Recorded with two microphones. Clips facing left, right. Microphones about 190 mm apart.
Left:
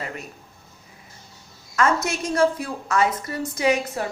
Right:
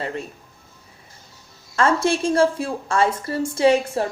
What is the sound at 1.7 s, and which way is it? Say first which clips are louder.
A woman's voice: right 3 dB; 30° right (ahead or behind).